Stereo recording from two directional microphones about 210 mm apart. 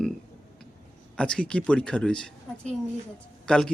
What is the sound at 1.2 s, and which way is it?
Speech, 5° left (ahead or behind).